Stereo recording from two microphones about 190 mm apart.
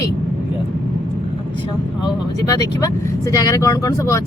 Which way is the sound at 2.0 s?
20° left (ahead or behind).